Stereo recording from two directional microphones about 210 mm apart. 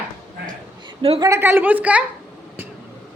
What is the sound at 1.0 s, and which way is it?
Speech, 25° right (ahead or behind).